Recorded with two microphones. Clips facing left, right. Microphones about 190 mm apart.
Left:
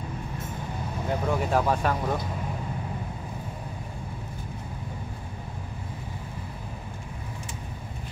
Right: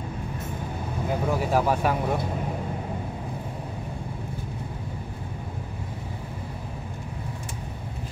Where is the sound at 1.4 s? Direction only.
5° right (ahead or behind).